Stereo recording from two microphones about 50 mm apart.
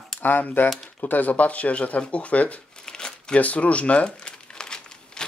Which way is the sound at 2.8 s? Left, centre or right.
Centre.